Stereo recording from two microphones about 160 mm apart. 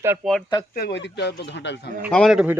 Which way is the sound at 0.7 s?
75° left (ahead or behind).